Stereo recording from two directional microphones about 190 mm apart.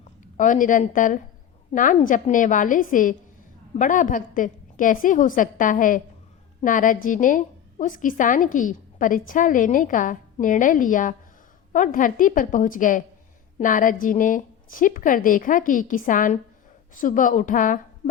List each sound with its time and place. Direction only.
0.3 s a woman's voice: 40° left (ahead or behind)